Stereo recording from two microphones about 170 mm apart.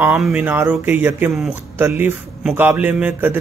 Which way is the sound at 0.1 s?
5° right (ahead or behind).